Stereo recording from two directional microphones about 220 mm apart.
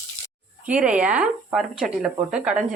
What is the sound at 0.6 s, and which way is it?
Speech, 5° right (ahead or behind).